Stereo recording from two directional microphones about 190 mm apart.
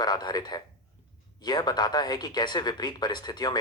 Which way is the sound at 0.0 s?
20° left (ahead or behind).